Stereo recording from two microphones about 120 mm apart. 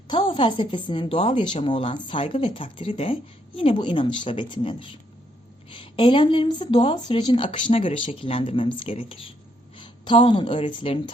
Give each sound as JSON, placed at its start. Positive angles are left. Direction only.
{"t": 0.1, "sound": "a woman's voice", "side_deg": 45}
{"t": 9.7, "sound": "a sound", "side_deg": 40}
{"t": 10.7, "sound": "a woman's voice", "side_deg": 45}